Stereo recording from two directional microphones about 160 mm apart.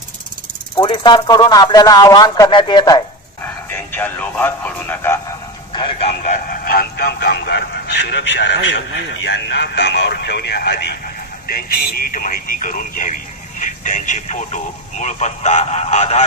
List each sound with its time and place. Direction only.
0.7 s speech: 30° left (ahead or behind)
3.7 s speech: 10° left (ahead or behind)
5.7 s a sound: 30° left (ahead or behind)
6.2 s music: 65° left (ahead or behind); by 8.5 s 90° left
9.3 s speech: 90° left
11.4 s speech: 70° left (ahead or behind); by 16.3 s 45° left (ahead or behind)